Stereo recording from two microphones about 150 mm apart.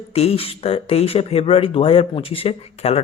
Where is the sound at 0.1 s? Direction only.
40° left (ahead or behind).